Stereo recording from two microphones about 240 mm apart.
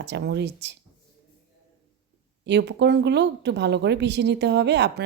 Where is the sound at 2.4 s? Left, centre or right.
Right.